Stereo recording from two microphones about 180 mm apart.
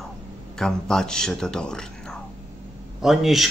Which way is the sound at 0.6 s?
5° left (ahead or behind).